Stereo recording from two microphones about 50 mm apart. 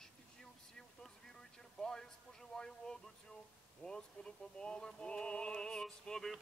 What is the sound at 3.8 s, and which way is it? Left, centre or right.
Speech, centre.